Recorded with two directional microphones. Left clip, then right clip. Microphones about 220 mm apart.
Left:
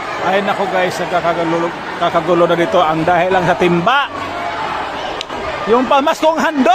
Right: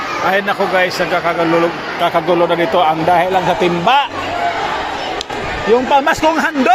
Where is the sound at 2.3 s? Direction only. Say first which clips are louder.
Left 3 dB; 15° left (ahead or behind).